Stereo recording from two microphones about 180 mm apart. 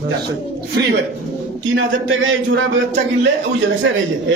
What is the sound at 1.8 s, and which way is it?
Speech, 90° right.